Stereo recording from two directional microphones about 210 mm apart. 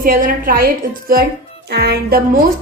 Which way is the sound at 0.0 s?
40° right (ahead or behind).